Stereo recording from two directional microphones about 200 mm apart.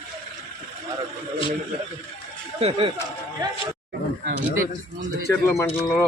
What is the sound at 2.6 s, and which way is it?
Speech, 25° right (ahead or behind).